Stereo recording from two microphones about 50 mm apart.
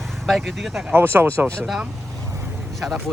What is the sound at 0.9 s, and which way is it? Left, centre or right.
Speech, right.